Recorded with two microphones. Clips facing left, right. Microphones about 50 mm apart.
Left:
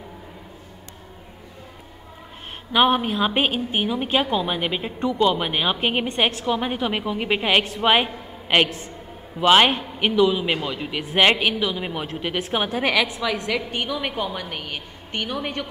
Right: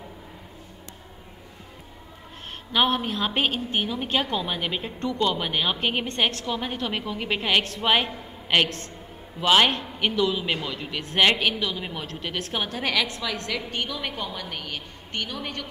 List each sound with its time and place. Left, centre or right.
2.7 s speech: centre